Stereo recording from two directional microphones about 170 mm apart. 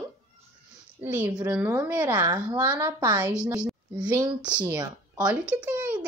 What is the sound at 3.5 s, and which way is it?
Speech, 5° right (ahead or behind).